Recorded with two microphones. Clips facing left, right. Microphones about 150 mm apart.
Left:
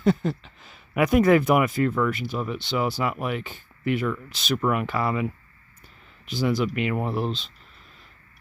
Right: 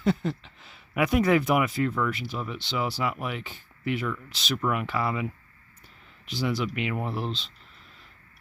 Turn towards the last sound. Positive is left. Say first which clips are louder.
# left 4 dB
turn(degrees=45)  # may be behind; listen again after turning